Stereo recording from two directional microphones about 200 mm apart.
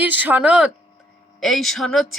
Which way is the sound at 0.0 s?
10° right (ahead or behind).